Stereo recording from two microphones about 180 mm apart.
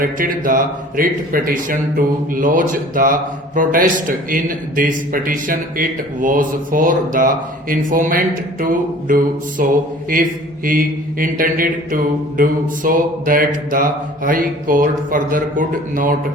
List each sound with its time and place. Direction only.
0.0 s speech: 50° right (ahead or behind)